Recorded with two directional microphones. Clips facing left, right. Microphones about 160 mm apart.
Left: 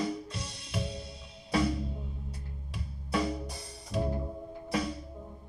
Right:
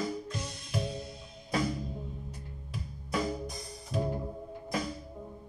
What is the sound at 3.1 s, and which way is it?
Music, 30° left (ahead or behind).